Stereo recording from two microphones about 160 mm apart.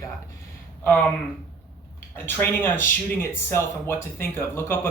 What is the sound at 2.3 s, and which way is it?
Speech, 15° left (ahead or behind).